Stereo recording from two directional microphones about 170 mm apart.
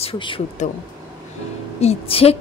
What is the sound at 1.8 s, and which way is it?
Speech, 35° left (ahead or behind).